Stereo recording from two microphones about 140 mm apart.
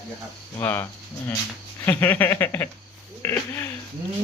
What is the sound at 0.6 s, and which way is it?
A man's voice, 15° left (ahead or behind).